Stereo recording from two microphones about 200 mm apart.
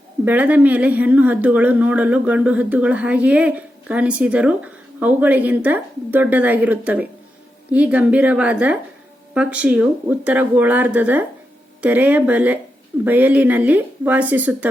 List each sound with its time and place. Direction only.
0.3 s speech: 10° right (ahead or behind)